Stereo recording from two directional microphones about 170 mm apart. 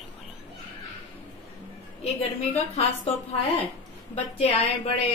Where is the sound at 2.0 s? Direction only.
40° left (ahead or behind).